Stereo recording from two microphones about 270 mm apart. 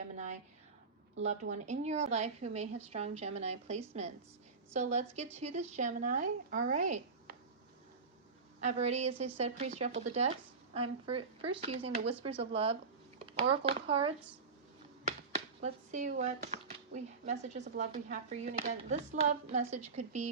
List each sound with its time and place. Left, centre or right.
1.2 s speech: right
8.6 s speech: right
15.6 s speech: right